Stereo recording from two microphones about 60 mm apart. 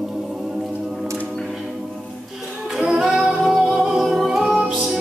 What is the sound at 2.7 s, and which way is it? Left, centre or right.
Singing, centre.